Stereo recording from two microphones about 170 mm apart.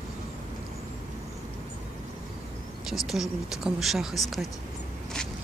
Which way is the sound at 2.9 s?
Centre (ahead or behind).